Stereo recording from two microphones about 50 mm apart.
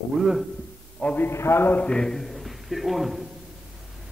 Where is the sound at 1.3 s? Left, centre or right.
Left.